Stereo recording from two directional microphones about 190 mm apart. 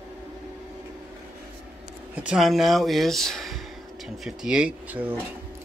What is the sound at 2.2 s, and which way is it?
Speech, 5° right (ahead or behind).